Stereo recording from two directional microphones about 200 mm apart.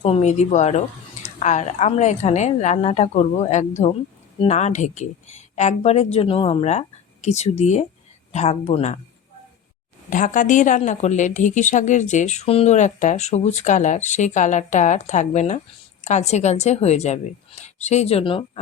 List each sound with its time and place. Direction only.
0.0 s a woman's voice: 30° left (ahead or behind)
10.1 s a woman's voice: 40° left (ahead or behind)